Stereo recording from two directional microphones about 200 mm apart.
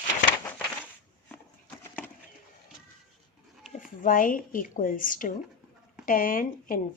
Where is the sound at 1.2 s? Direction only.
10° left (ahead or behind).